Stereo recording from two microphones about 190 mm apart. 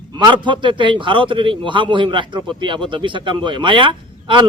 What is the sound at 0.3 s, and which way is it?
A man's voice, 25° right (ahead or behind).